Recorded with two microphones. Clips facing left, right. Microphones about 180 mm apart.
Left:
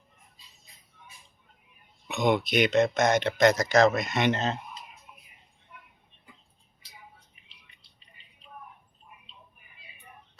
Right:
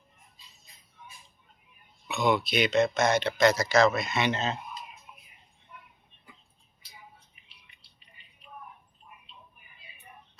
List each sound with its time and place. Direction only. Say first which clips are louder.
2.0 s speech: left 1 dB; 50° left (ahead or behind)